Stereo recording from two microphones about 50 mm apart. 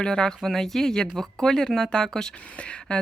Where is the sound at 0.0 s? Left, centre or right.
Centre.